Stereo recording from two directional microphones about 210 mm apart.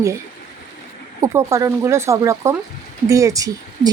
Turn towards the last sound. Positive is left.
turn(degrees=-15)  # may be behind; listen again after turning